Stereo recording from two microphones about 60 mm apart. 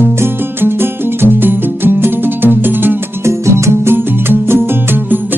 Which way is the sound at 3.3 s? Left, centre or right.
Right.